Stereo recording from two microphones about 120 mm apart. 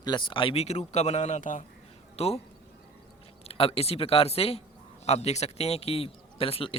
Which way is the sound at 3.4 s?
55° left (ahead or behind).